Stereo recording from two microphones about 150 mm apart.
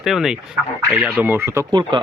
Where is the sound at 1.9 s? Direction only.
30° right (ahead or behind).